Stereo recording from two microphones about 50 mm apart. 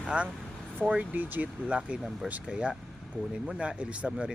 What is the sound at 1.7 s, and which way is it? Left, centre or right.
Speech, right.